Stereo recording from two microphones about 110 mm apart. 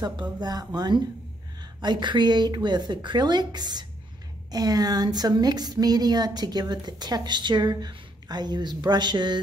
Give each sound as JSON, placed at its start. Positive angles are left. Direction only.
{"t": 0.0, "sound": "a woman's voice", "side_deg": -40}